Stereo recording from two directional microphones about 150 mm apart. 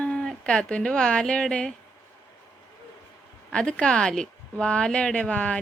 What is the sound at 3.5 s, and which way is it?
Speech, 5° left (ahead or behind).